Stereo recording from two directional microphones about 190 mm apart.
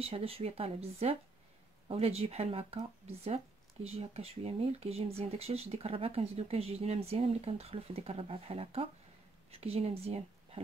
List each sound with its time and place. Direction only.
0.0 s speech: 30° right (ahead or behind)